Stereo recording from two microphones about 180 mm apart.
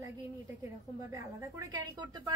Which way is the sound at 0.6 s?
15° right (ahead or behind).